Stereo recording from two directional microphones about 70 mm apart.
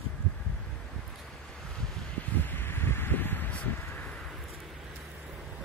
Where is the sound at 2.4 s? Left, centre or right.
Left.